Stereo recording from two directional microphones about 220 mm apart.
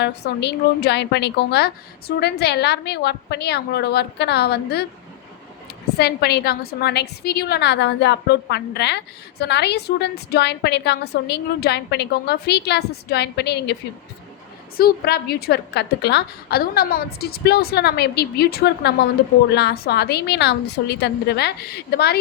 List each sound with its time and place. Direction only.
0.0 s a woman's voice: 50° left (ahead or behind)
6.0 s a woman's voice: 45° left (ahead or behind)
14.8 s a woman's voice: 45° left (ahead or behind)